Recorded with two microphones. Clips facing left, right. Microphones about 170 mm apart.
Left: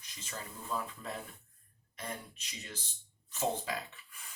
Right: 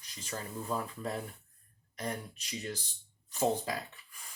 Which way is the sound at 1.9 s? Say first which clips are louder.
Right 5 dB; 35° right (ahead or behind).